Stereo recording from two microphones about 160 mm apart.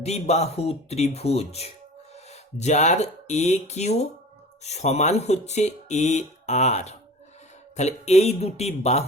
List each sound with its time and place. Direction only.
0.0 s speech: 40° left (ahead or behind)